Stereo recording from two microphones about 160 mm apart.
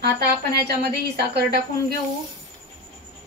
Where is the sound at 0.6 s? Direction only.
85° right.